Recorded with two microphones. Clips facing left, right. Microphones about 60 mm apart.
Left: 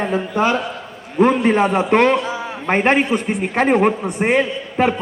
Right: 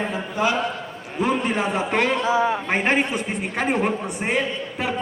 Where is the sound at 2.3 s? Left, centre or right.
Right.